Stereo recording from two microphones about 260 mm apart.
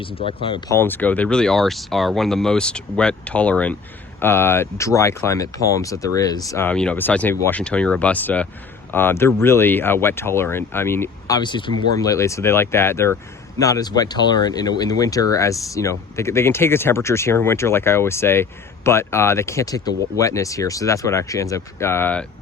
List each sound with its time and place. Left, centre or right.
0.2 s speech: left
0.8 s speech: centre